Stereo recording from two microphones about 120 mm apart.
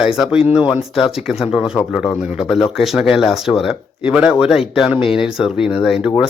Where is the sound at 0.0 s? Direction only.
5° right (ahead or behind).